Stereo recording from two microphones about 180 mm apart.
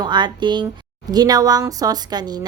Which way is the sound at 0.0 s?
25° right (ahead or behind).